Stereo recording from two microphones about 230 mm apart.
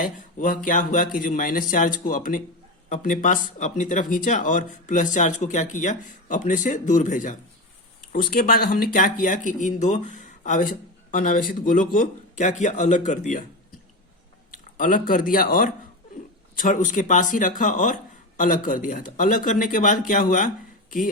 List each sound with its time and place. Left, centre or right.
0.0 s speech: left
14.8 s speech: left